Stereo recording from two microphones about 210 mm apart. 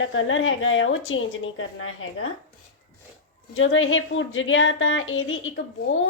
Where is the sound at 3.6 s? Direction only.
70° left (ahead or behind).